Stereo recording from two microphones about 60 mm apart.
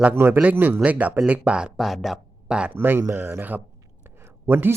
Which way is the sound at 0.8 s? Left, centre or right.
Right.